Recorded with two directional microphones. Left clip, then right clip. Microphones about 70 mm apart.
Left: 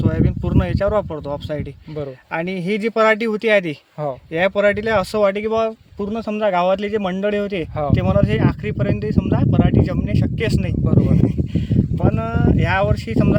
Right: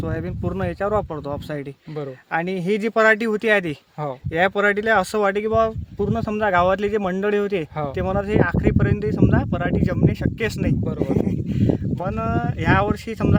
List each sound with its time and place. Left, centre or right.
0.0 s speech: right